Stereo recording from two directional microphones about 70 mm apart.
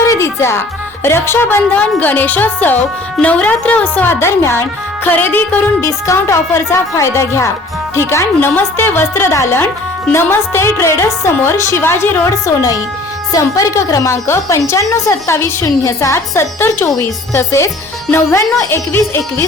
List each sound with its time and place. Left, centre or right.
0.1 s music: left
1.0 s a woman's voice: left
1.7 s speech: left
4.1 s a woman's voice: left
5.0 s speech: left
5.8 s a woman's voice: left
8.4 s a woman's voice: left
12.2 s a woman's voice: left